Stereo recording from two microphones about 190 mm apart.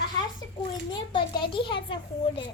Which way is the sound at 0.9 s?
25° left (ahead or behind).